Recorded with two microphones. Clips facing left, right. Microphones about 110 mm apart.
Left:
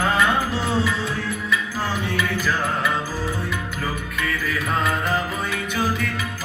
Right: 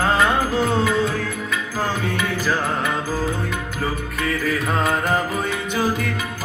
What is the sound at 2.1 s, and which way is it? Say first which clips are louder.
Music: right 1 dB; 40° right (ahead or behind).